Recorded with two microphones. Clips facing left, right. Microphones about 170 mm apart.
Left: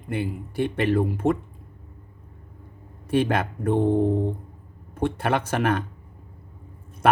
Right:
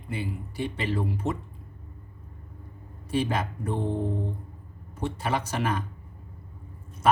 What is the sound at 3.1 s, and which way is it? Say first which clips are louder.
Speech: left 5 dB; 60° left (ahead or behind).